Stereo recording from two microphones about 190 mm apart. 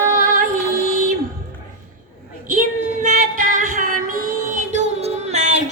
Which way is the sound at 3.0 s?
45° right (ahead or behind).